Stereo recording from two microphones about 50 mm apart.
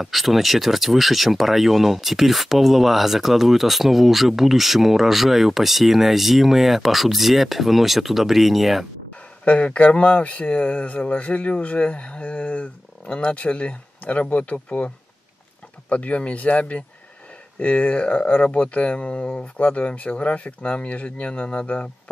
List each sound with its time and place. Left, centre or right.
0.0 s speech: centre
9.4 s speech: left
15.9 s speech: left